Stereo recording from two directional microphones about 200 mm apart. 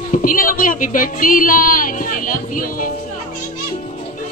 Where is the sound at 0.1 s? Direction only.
45° left (ahead or behind).